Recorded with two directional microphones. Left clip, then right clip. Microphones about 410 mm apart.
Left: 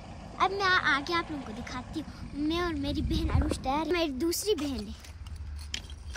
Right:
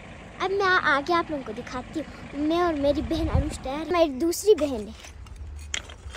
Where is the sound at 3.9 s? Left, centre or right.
Centre.